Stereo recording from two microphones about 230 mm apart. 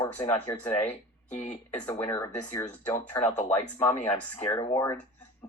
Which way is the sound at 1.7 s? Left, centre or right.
Centre.